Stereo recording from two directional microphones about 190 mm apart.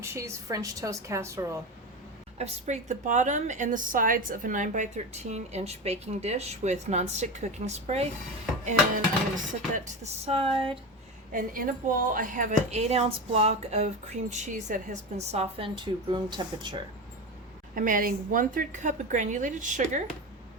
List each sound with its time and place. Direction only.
0.0 s a woman's voice: 15° right (ahead or behind)
2.4 s a woman's voice: 35° right (ahead or behind)
9.3 s a woman's voice: 40° right (ahead or behind)
11.3 s a woman's voice: 45° right (ahead or behind); by 16.7 s 25° right (ahead or behind)
17.7 s a woman's voice: 45° right (ahead or behind)